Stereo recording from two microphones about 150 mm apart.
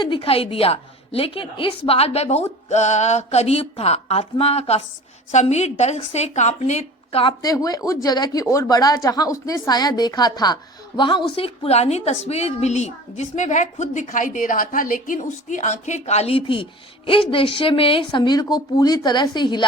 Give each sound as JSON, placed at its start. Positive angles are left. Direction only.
{"t": 0.0, "sound": "a woman's voice", "side_deg": 35}
{"t": 7.4, "sound": "a woman's voice", "side_deg": 25}